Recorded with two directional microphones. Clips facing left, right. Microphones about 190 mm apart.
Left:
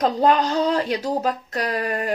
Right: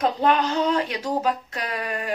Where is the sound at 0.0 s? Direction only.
35° left (ahead or behind).